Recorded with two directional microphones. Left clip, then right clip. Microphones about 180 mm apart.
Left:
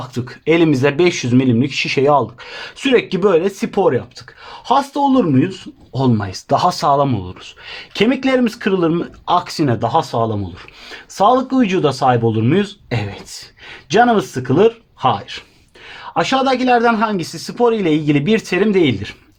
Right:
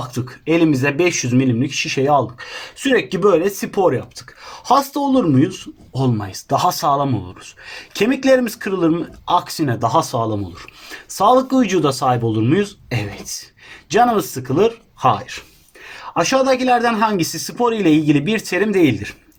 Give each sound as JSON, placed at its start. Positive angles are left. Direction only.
{"t": 0.0, "sound": "speech", "side_deg": 50}